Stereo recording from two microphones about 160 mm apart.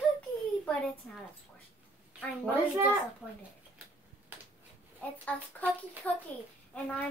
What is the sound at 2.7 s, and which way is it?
Speech, 15° right (ahead or behind).